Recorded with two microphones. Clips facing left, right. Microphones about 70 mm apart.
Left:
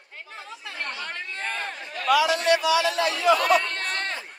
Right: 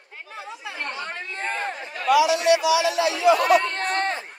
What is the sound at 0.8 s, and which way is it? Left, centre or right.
Chatter, right.